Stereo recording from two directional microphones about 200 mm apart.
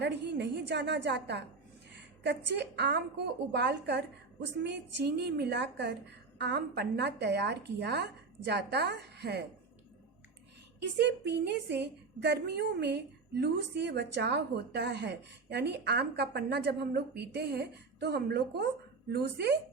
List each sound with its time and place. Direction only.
0.0 s a woman's voice: 60° right (ahead or behind)
10.8 s a woman's voice: 60° right (ahead or behind)